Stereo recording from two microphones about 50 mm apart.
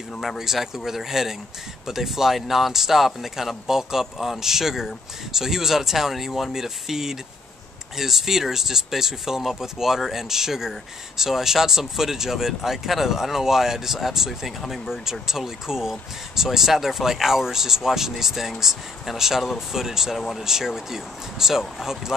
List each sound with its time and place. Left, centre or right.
0.4 s speech: centre
20.2 s speech: centre
20.4 s speech: centre